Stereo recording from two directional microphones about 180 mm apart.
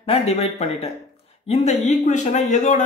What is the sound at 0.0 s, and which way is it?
Speech, 35° left (ahead or behind).